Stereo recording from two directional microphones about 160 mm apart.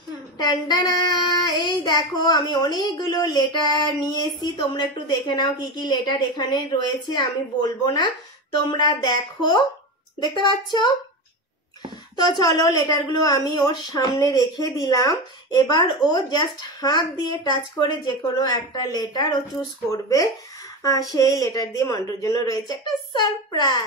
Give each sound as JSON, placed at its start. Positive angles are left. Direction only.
{"t": 0.4, "sound": "child singing", "side_deg": 25}
{"t": 12.2, "sound": "child singing", "side_deg": 25}